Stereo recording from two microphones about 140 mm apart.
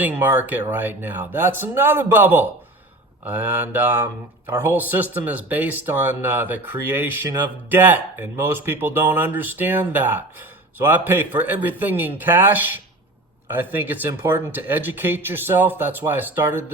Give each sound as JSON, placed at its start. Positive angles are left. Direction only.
{"t": 0.0, "sound": "speech", "side_deg": -15}